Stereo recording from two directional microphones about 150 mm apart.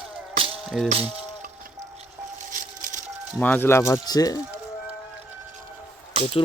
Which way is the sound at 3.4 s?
10° left (ahead or behind).